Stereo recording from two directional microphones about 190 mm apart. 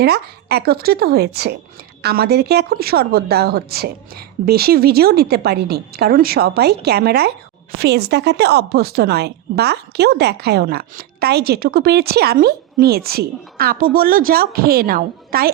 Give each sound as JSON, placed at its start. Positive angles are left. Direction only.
{"t": 0.0, "sound": "a woman's voice", "side_deg": -60}